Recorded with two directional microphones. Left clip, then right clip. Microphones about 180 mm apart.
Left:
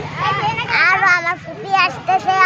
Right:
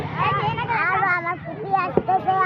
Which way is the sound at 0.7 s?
30° left (ahead or behind).